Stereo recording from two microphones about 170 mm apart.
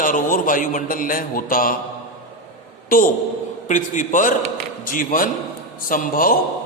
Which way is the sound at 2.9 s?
55° left (ahead or behind).